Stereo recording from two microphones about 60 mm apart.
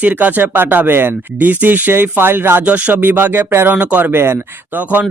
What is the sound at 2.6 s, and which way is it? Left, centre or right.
Speech, right.